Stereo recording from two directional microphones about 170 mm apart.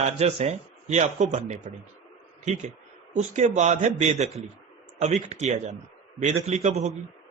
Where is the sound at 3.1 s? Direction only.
45° right (ahead or behind).